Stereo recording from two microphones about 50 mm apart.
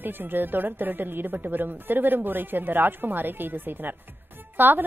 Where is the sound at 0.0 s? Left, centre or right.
Right.